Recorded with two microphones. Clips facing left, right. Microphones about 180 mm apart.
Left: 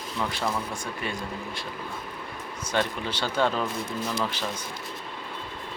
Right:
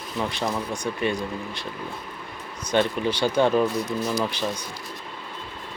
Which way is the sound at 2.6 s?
15° right (ahead or behind).